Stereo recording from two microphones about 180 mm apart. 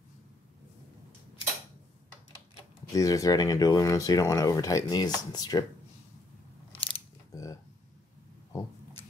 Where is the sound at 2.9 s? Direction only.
20° left (ahead or behind).